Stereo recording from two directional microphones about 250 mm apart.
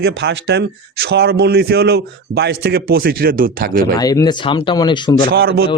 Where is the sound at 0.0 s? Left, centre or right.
Right.